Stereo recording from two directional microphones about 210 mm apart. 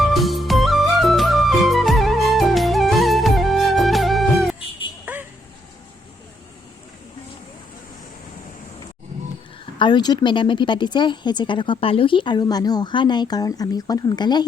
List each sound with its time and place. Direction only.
0.0 s music: centre (ahead or behind)
5.1 s a sound: 5° right (ahead or behind)
9.7 s speech: 20° left (ahead or behind)